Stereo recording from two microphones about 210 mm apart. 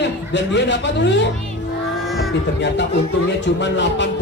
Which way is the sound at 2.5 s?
55° left (ahead or behind).